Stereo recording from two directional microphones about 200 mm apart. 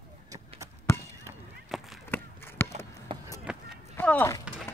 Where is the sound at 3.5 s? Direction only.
5° right (ahead or behind).